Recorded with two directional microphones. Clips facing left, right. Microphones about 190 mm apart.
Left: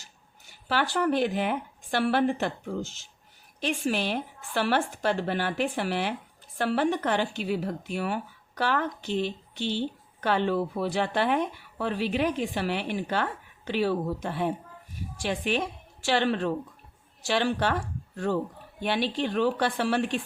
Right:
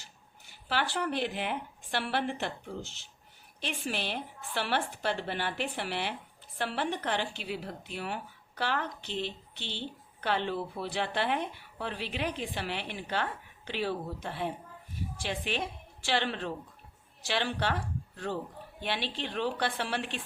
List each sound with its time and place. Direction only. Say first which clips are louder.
0.7 s a woman's voice: left 6 dB; 45° left (ahead or behind)